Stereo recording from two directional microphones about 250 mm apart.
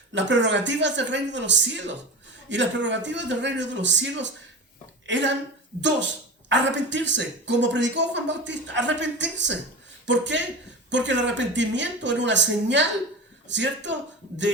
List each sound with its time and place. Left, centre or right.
0.1 s a woman's voice: right
6.5 s speech: right